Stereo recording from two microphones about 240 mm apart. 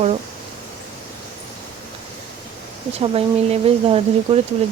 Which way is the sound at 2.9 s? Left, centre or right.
Right.